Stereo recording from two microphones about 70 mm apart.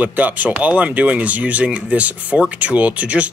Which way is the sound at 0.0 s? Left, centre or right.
Right.